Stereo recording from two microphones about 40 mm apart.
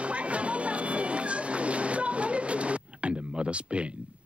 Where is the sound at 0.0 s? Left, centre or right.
Right.